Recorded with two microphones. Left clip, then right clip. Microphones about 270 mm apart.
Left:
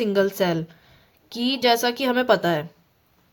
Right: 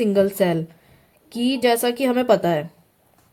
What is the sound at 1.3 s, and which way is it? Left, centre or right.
Speech, centre.